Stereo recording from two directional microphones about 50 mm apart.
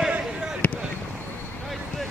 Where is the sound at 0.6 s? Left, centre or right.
Left.